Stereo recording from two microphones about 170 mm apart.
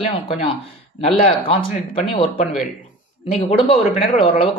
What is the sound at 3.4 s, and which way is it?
Speech, 35° left (ahead or behind).